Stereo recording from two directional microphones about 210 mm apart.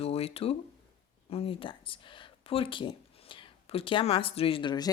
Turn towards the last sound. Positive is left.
turn(degrees=20)  # may be behind; listen again after turning